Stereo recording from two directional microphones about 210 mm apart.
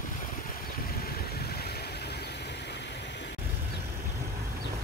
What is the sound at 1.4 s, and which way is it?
Vehicle, 50° left (ahead or behind).